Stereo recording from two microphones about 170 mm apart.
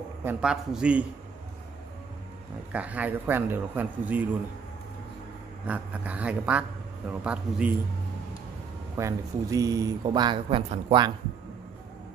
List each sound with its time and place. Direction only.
0.2 s a man's voice: 10° right (ahead or behind)
2.7 s a man's voice: 10° right (ahead or behind)
5.7 s a man's voice: 10° right (ahead or behind)
8.9 s speech: 20° right (ahead or behind)